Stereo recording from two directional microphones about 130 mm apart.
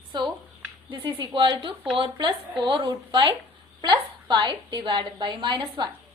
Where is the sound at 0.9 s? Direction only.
40° right (ahead or behind).